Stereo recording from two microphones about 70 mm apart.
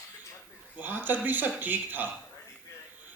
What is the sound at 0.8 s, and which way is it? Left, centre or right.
A man's voice, right.